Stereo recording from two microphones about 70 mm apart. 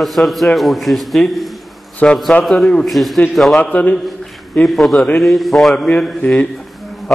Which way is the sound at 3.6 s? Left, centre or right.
Left.